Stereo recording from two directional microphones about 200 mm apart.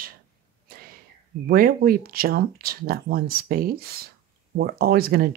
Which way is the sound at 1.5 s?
45° right (ahead or behind).